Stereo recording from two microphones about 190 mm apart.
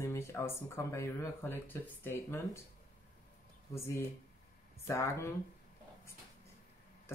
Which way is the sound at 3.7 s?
15° left (ahead or behind).